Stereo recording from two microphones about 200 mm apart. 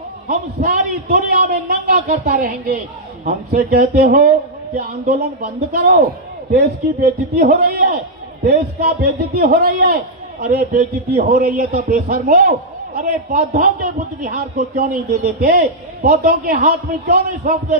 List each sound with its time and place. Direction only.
0.3 s a man's voice: 40° right (ahead or behind)
15.4 s a man's voice: 45° right (ahead or behind)